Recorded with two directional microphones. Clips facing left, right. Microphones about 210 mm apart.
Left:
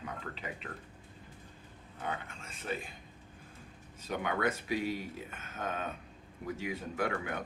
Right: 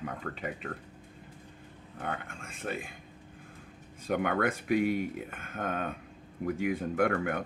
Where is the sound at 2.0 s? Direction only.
55° right (ahead or behind).